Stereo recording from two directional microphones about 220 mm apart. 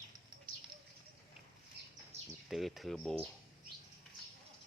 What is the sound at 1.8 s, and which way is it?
Bird, 50° right (ahead or behind).